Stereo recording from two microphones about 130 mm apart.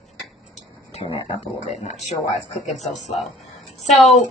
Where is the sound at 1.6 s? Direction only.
60° left (ahead or behind).